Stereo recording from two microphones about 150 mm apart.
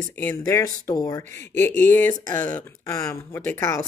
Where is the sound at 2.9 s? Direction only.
20° left (ahead or behind).